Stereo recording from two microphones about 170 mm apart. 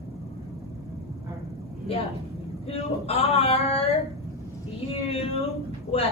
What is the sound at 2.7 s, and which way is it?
A woman's voice, 35° left (ahead or behind).